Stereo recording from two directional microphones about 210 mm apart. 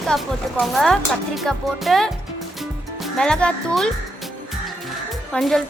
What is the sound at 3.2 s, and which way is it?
Speech, 5° left (ahead or behind).